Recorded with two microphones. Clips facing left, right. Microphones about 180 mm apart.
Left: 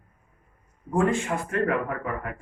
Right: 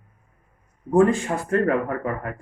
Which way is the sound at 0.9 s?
35° right (ahead or behind).